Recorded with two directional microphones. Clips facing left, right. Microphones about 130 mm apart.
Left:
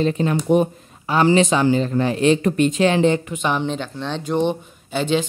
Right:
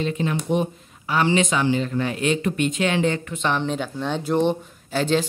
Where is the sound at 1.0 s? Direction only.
35° left (ahead or behind).